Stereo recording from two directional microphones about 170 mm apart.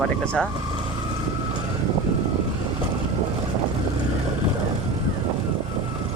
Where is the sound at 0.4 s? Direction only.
5° left (ahead or behind).